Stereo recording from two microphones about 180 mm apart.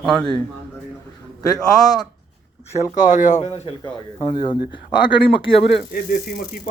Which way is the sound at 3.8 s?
25° left (ahead or behind).